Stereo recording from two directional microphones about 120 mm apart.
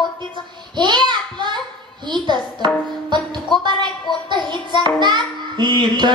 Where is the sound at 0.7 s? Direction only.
40° right (ahead or behind).